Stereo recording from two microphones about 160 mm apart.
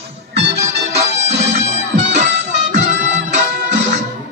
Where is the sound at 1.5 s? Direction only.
45° right (ahead or behind).